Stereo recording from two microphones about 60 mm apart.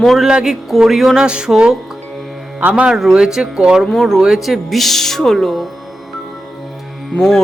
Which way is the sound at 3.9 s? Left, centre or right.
Centre.